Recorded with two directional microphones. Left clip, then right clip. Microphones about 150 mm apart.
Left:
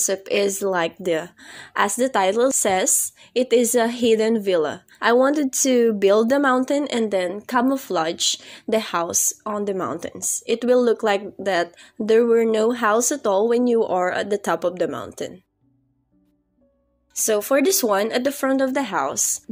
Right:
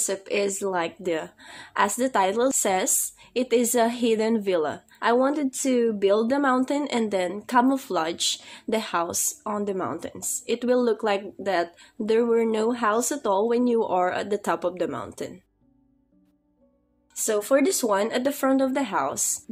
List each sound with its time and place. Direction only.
0.0 s a woman's voice: 35° left (ahead or behind)
9.8 s a woman's voice: 35° left (ahead or behind)
17.1 s speech: 35° left (ahead or behind)